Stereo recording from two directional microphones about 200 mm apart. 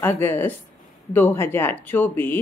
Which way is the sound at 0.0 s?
10° left (ahead or behind).